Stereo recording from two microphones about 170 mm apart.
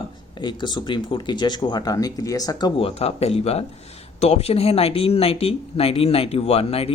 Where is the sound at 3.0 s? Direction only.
40° left (ahead or behind).